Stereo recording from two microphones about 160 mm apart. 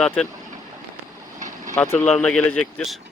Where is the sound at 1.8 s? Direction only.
10° left (ahead or behind).